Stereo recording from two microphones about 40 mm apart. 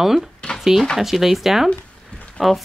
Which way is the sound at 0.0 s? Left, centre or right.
Centre.